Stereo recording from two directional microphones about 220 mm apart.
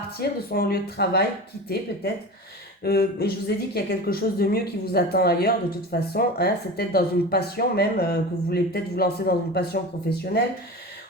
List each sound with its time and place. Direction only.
0.2 s a woman's voice: 45° left (ahead or behind)
2.8 s a woman's voice: 45° left (ahead or behind)